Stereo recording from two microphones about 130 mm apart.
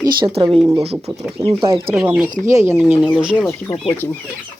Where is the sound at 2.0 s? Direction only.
10° right (ahead or behind).